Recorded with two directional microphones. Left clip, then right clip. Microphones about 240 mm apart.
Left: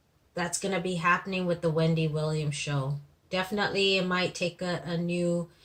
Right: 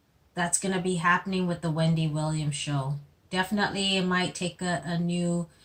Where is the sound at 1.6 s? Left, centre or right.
Left.